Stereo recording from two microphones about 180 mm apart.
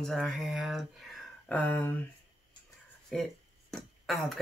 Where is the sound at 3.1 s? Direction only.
5° left (ahead or behind).